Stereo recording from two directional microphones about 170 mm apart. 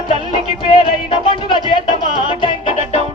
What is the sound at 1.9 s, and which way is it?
Music, 55° right (ahead or behind).